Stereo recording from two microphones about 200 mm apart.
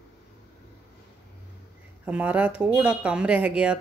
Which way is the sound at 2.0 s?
5° right (ahead or behind).